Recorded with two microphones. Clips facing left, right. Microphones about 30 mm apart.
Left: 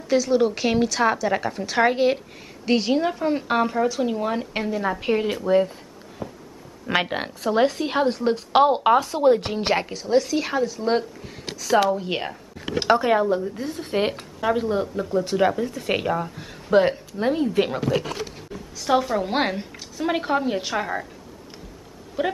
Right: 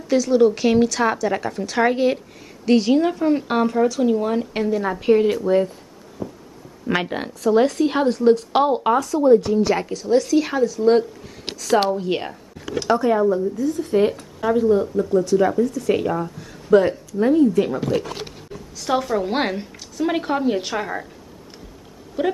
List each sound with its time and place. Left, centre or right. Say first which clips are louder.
0.1 s a woman's voice: right 3 dB; centre
6.2 s a sound: right 3 dB; left
6.9 s a woman's voice: right 1 dB; centre
8.7 s speech: even; left
9.2 s speech: right 4 dB; left
9.8 s a woman's voice: right 2 dB; centre
12.6 s speech: even; left
13.6 s speech: right 6 dB; left
16.1 s a woman's voice: right 1 dB; centre
16.3 s speech: right 4 dB; left
18.8 s a woman's voice: even; centre
22.2 s a woman's voice: right 3 dB; centre